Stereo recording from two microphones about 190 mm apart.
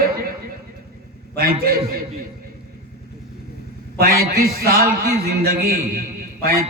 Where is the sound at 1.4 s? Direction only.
50° right (ahead or behind).